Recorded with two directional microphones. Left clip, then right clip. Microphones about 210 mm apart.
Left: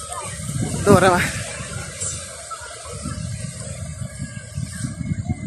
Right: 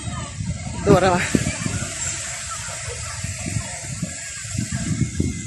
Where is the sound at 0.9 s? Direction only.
15° left (ahead or behind).